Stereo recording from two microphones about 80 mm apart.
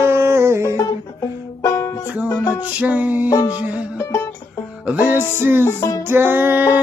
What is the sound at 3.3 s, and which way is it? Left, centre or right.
Music, left.